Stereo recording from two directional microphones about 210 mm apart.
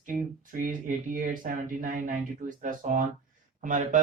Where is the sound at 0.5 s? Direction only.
40° right (ahead or behind).